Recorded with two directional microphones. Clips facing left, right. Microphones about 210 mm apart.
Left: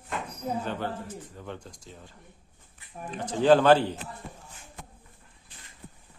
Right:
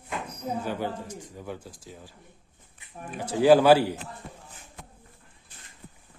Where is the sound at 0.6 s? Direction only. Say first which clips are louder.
Right 1 dB; 10° right (ahead or behind).